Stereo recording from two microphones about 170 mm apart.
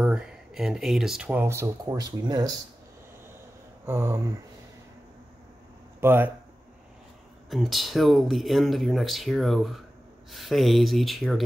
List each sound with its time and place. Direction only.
0.0 s speech: 5° right (ahead or behind); by 2.5 s 20° right (ahead or behind)
3.8 s a sound: 15° right (ahead or behind)
5.9 s speech: 15° right (ahead or behind)
7.4 s speech: centre (ahead or behind)